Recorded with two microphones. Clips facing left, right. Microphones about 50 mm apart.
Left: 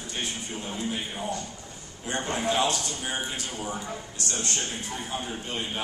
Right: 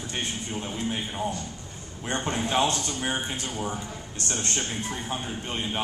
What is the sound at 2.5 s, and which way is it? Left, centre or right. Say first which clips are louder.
A man's voice: right 1 dB; right.